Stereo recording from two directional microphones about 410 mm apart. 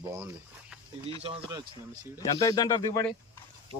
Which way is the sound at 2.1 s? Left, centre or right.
Centre.